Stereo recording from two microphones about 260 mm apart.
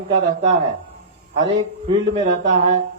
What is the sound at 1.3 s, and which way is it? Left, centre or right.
Speech, centre.